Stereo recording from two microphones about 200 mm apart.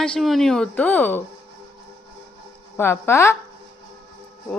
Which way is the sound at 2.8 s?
10° left (ahead or behind).